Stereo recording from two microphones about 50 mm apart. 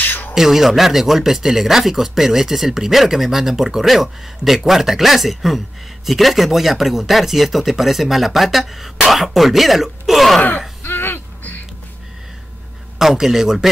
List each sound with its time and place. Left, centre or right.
0.0 s a sound: left
0.3 s speech: centre
10.8 s throat clearing: left
13.0 s speech: centre